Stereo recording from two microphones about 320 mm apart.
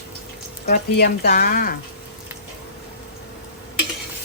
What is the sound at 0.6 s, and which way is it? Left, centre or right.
Speech, left.